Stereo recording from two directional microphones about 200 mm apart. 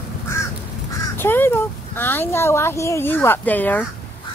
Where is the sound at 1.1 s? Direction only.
10° left (ahead or behind).